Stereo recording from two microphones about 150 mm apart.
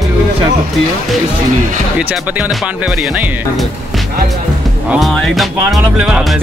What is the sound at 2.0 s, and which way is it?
Speech, 10° right (ahead or behind).